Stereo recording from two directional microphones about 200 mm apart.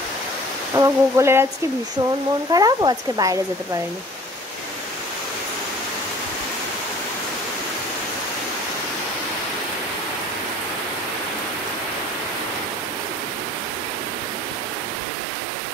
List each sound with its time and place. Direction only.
0.7 s speech: 15° right (ahead or behind)
2.5 s speech: 20° right (ahead or behind)